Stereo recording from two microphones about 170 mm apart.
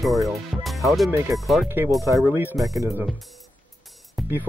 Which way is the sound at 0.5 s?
Centre (ahead or behind).